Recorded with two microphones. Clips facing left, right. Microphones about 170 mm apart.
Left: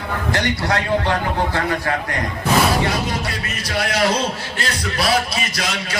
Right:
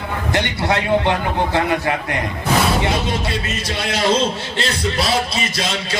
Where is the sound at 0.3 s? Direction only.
20° right (ahead or behind).